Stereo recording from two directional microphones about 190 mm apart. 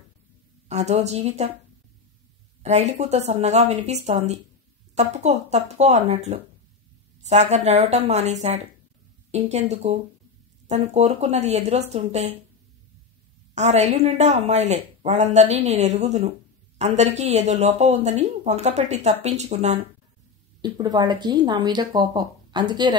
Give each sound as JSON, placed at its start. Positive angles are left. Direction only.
{"t": 0.7, "sound": "speech", "side_deg": -35}
{"t": 2.6, "sound": "speech", "side_deg": -35}
{"t": 13.6, "sound": "speech", "side_deg": -35}
{"t": 20.6, "sound": "speech", "side_deg": -20}